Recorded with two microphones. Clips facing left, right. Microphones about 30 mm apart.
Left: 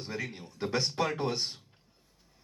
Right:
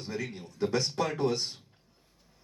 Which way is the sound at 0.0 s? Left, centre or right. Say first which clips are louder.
Right 1 dB; centre.